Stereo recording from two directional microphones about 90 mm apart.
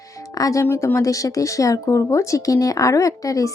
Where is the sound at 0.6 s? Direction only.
30° left (ahead or behind).